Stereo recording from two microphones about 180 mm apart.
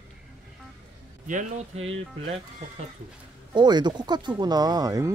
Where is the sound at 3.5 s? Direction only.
25° right (ahead or behind).